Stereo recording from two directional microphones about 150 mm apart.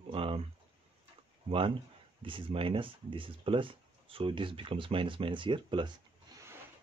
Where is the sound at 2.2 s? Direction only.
35° right (ahead or behind).